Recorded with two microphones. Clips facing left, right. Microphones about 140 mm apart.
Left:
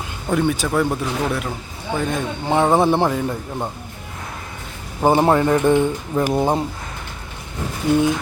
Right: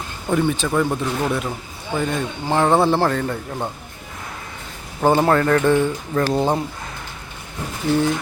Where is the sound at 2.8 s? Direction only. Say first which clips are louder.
Left 1 dB; 20° left (ahead or behind).